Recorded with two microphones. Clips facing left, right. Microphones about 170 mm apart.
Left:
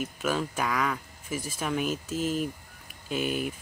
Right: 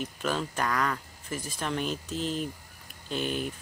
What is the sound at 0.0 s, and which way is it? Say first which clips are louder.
Speech: left 2 dB; 5° left (ahead or behind).